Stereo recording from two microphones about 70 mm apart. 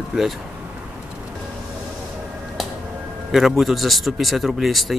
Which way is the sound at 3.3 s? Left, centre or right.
Centre.